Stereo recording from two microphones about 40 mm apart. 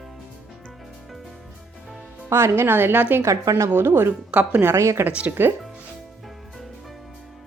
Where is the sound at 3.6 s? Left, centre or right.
Right.